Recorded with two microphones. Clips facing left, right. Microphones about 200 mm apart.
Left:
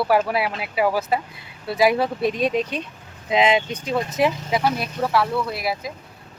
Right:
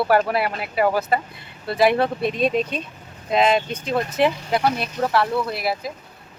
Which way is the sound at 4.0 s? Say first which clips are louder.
Right 1 dB; centre (ahead or behind).